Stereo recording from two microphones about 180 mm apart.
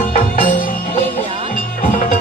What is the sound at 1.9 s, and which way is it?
Music, 50° left (ahead or behind).